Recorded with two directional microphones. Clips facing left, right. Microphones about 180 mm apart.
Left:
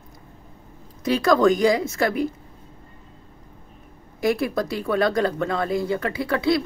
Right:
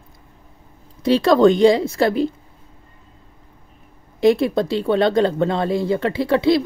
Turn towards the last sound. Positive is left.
turn(degrees=-25)  # may be behind; listen again after turning